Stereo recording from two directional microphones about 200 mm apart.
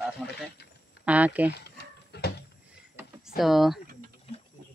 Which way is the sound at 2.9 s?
Centre (ahead or behind).